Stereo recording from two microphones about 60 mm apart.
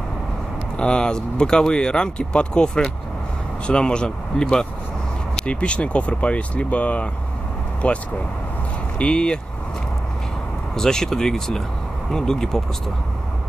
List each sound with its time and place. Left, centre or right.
0.7 s speech: centre
10.8 s speech: centre